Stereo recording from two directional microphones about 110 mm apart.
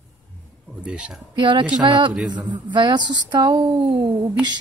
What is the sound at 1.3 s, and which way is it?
Speech, 45° right (ahead or behind).